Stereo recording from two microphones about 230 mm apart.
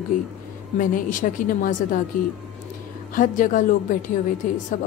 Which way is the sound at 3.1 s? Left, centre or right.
Left.